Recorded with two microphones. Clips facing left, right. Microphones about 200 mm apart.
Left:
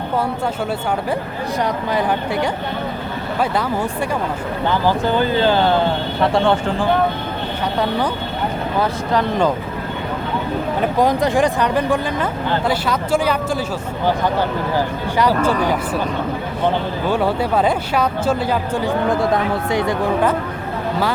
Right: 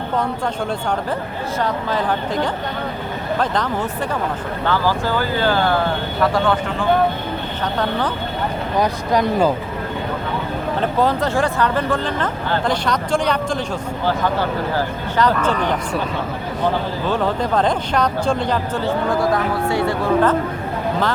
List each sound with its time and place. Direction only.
1.6 s speech: 15° left (ahead or behind)
4.6 s speech: 20° left (ahead or behind)
7.8 s speech: 10° left (ahead or behind)
8.8 s speech: 15° right (ahead or behind)
10.8 s speech: 15° left (ahead or behind)
15.2 s speech: 10° left (ahead or behind)
17.1 s speech: 10° left (ahead or behind)